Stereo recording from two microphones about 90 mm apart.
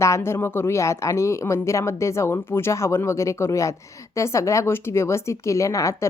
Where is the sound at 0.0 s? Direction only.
30° left (ahead or behind).